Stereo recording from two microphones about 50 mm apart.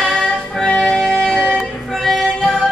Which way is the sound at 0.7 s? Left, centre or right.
Centre.